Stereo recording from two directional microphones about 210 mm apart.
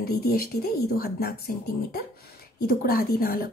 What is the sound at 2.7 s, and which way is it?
Speech, 45° left (ahead or behind).